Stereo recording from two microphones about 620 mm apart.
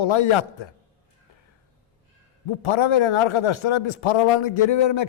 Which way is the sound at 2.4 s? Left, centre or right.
Left.